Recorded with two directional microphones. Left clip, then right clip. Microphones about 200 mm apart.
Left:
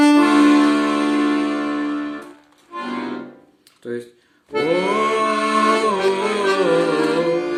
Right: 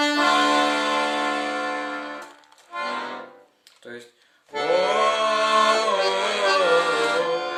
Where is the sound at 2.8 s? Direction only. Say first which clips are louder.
Left 1 dB; 20° right (ahead or behind).